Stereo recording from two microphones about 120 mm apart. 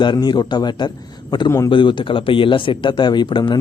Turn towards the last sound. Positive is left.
turn(degrees=40)  # may be behind; listen again after turning